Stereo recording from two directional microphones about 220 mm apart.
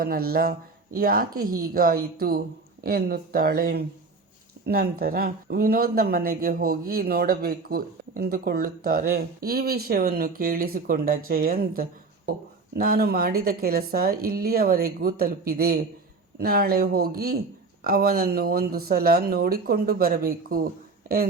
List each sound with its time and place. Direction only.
0.0 s speech: 45° right (ahead or behind)